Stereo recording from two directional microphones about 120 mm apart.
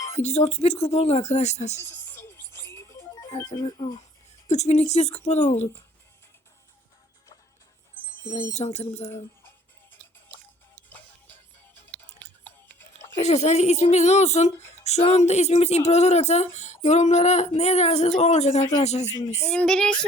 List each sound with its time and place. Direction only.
0.1 s speech: 65° left (ahead or behind)
2.0 s music: 20° left (ahead or behind)
3.3 s speech: 20° left (ahead or behind)
3.6 s speech: 35° left (ahead or behind)
4.4 s a woman's voice: 70° left (ahead or behind)
8.5 s speech: 65° left (ahead or behind)
10.8 s music: 15° left (ahead or behind)
13.1 s a woman's voice: 70° left (ahead or behind)
19.5 s a sound: 5° left (ahead or behind)